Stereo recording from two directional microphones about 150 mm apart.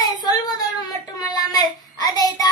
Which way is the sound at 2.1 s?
25° left (ahead or behind).